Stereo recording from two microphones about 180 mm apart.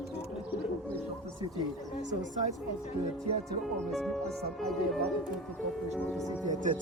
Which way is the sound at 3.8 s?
Centre (ahead or behind).